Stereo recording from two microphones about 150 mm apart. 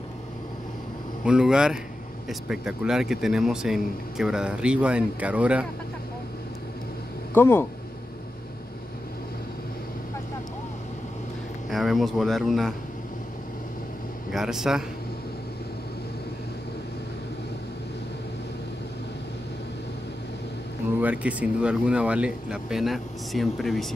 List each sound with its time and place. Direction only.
1.2 s speech: 5° right (ahead or behind)
7.3 s speech: 15° left (ahead or behind)
11.7 s speech: centre (ahead or behind)
14.3 s speech: 5° right (ahead or behind)
21.0 s speech: 10° right (ahead or behind)